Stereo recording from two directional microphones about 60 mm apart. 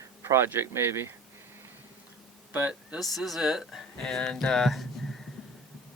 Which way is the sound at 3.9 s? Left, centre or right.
Centre.